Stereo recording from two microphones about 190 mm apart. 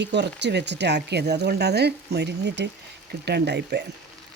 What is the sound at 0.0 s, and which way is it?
Speech, 65° right (ahead or behind).